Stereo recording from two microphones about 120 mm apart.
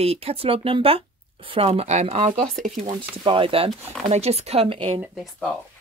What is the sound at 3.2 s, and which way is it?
Speech, 45° right (ahead or behind).